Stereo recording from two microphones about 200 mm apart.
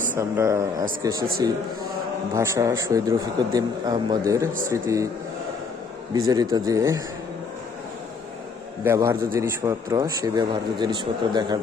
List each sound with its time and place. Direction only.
0.2 s a man's voice: 15° right (ahead or behind)
6.2 s a man's voice: 20° right (ahead or behind)
8.8 s a man's voice: 15° right (ahead or behind)